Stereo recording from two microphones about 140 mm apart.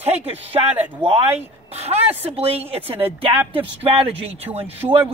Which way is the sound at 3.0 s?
15° right (ahead or behind).